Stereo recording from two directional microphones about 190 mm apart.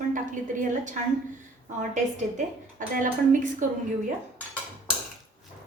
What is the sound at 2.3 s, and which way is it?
A woman's voice, 45° right (ahead or behind).